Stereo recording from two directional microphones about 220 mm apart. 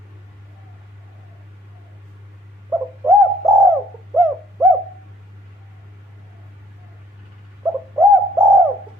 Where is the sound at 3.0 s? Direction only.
15° right (ahead or behind).